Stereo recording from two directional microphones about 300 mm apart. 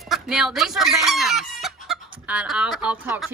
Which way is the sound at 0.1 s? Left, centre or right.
Centre.